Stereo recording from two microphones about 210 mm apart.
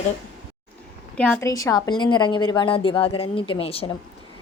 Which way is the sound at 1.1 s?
5° left (ahead or behind).